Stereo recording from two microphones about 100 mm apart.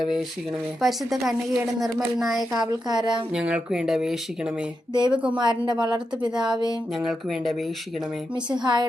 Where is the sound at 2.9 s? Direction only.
45° right (ahead or behind).